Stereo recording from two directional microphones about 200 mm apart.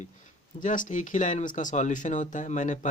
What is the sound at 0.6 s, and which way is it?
Speech, 40° left (ahead or behind).